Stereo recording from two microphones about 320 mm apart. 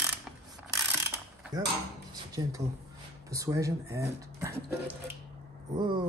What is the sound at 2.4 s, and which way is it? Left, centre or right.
Speech, centre.